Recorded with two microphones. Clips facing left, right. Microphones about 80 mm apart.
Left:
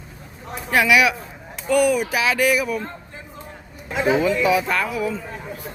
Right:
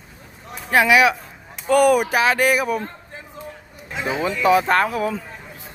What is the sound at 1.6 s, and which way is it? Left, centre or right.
Speech, right.